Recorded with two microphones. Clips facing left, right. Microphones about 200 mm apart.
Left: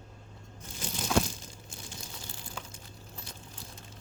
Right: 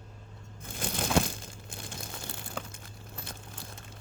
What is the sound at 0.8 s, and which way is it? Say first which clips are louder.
Crumpling: right 1 dB; 60° right (ahead or behind).